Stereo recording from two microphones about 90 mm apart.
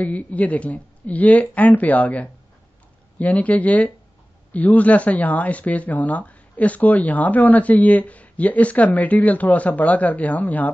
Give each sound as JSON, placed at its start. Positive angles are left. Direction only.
{"t": 0.0, "sound": "speech", "side_deg": 15}